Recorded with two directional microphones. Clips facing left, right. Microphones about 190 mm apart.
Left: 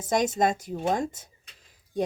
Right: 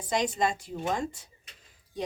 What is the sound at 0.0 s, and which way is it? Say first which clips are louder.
A child's voice: left 4 dB; 45° left (ahead or behind).